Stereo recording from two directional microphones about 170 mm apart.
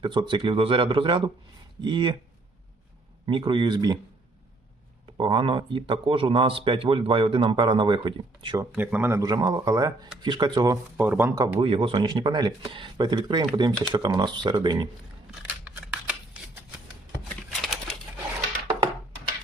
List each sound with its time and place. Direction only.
0.0 s speech: 30° right (ahead or behind)
3.2 s speech: 30° right (ahead or behind)
5.1 s speech: 30° right (ahead or behind)
8.7 s speech: 10° right (ahead or behind)
10.9 s speech: 10° right (ahead or behind)
11.6 s speech: 35° right (ahead or behind)
15.6 s shuffling cards: 10° right (ahead or behind)
17.2 s typewriter: centre (ahead or behind)